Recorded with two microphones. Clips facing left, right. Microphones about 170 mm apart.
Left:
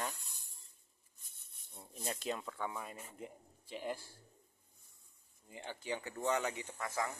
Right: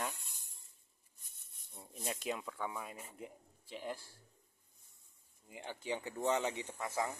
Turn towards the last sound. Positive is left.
turn(degrees=-20)  # may be behind; listen again after turning